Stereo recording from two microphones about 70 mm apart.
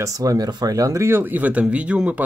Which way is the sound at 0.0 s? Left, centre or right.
Right.